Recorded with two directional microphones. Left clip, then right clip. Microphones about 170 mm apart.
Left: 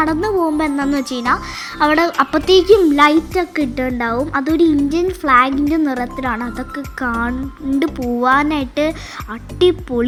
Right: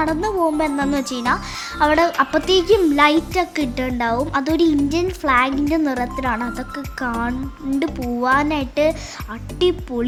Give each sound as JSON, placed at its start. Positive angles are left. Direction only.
{"t": 0.0, "sound": "a child's voice", "side_deg": 10}